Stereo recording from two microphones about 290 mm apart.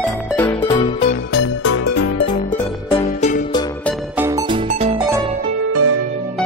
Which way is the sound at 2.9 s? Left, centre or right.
Left.